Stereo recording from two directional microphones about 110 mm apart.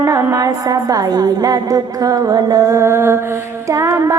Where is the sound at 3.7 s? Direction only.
25° right (ahead or behind).